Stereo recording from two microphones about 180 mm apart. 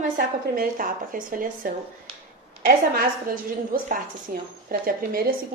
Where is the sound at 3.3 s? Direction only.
50° right (ahead or behind).